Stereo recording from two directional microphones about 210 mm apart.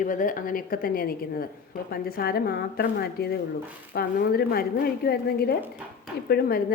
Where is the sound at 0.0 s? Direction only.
40° left (ahead or behind).